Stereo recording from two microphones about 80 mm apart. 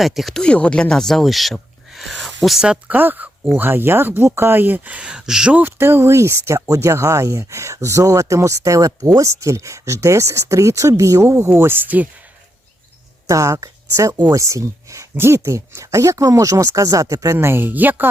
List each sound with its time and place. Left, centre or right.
0.0 s speech: centre
2.6 s speech: right
5.5 s speech: right
13.2 s speech: right
17.3 s speech: right